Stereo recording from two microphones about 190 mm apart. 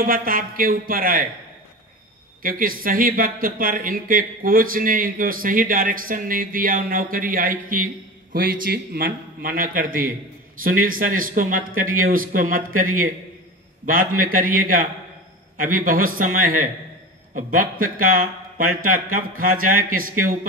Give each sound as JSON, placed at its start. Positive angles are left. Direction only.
{"t": 0.0, "sound": "speech", "side_deg": -50}
{"t": 2.4, "sound": "speech", "side_deg": -50}
{"t": 13.8, "sound": "speech", "side_deg": -45}